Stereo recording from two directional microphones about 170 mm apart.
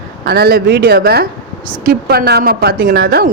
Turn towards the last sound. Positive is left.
turn(degrees=-65)  # may be behind; listen again after turning